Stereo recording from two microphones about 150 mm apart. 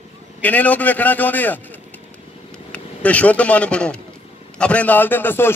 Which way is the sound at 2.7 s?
10° left (ahead or behind).